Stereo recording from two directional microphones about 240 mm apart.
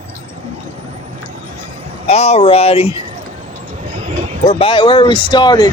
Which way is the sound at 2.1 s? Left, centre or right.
Left.